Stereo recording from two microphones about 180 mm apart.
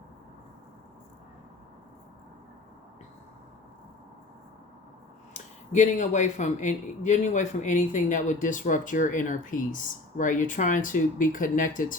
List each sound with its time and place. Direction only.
5.3 s speech: 45° left (ahead or behind)